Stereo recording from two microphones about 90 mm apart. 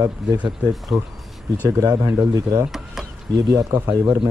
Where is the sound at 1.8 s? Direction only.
45° right (ahead or behind).